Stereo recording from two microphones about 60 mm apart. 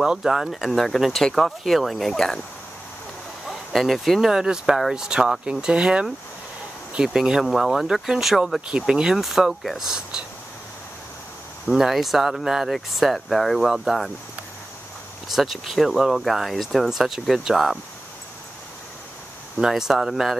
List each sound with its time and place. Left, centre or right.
0.0 s speech: centre
3.4 s speech: centre
4.3 s speech: centre
7.1 s speech: centre
9.8 s speech: centre
11.6 s speech: centre
15.3 s speech: centre
19.6 s speech: centre